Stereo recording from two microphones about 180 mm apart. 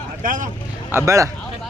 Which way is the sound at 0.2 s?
45° right (ahead or behind).